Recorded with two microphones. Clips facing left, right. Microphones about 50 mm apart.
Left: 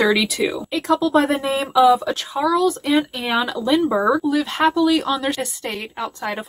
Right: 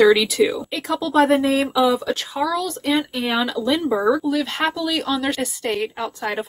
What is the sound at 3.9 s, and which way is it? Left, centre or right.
Speech, left.